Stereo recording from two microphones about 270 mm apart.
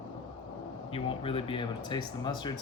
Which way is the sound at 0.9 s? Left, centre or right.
Centre.